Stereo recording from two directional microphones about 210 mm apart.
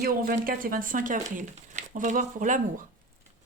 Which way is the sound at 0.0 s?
45° right (ahead or behind).